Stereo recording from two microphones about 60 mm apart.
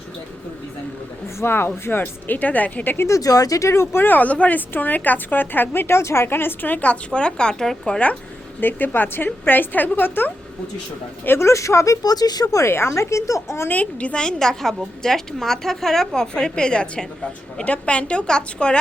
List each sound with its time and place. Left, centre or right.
1.4 s speech: left
3.1 s speech: left; by 7.9 s centre
8.6 s speech: left
11.3 s speech: left
12.0 s speech: left
12.6 s speech: left
13.7 s a woman's voice: left